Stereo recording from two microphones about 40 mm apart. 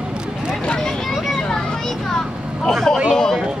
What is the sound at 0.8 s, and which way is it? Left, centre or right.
Vehicle, centre.